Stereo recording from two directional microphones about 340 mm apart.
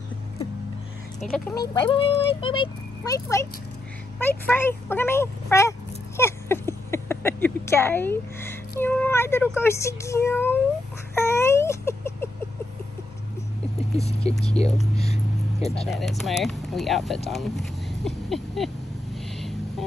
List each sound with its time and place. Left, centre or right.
1.6 s speech: centre
11.1 s cat: centre
13.9 s speech: centre
16.0 s speech: centre
17.3 s a sound: centre